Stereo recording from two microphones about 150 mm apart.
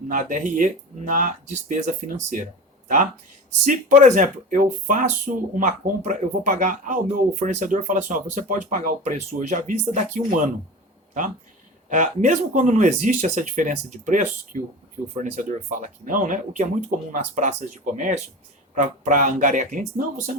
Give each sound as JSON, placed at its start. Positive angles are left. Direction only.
{"t": 0.1, "sound": "speech", "side_deg": -60}
{"t": 11.9, "sound": "speech", "side_deg": -55}